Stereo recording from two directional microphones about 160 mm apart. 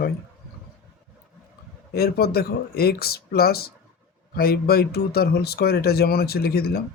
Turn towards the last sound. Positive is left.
turn(degrees=75)  # may be behind; listen again after turning